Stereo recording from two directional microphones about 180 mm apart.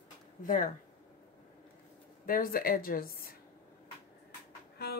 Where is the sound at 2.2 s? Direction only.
50° left (ahead or behind).